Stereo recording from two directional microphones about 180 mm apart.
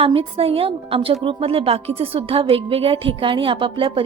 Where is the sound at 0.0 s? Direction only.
30° right (ahead or behind).